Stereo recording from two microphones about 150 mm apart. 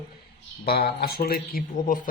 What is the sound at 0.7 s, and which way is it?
Speech, 90° left.